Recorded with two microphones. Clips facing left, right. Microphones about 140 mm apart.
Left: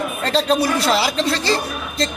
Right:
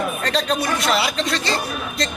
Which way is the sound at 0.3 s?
30° left (ahead or behind).